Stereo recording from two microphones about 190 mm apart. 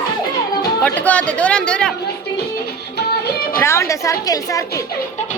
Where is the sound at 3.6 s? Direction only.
15° left (ahead or behind).